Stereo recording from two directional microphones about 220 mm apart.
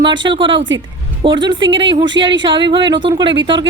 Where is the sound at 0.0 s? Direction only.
20° right (ahead or behind).